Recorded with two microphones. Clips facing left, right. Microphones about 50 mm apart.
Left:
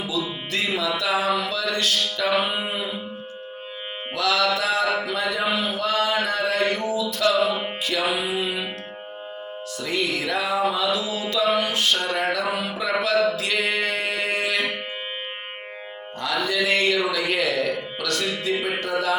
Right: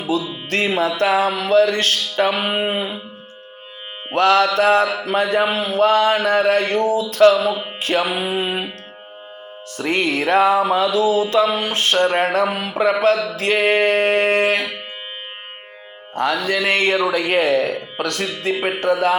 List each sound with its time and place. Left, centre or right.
0.0 s music: right
4.1 s music: right
8.0 s music: right
9.7 s music: right
13.3 s a sound: right
16.1 s music: right